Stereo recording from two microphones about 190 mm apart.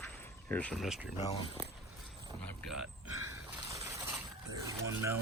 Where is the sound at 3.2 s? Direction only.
15° right (ahead or behind).